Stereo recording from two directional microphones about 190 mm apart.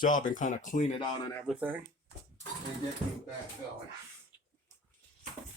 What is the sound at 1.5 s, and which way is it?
Speech, 10° right (ahead or behind).